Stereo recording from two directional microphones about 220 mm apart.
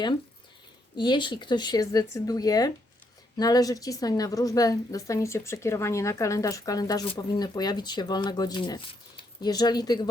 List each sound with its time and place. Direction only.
0.9 s a woman's voice: 20° left (ahead or behind)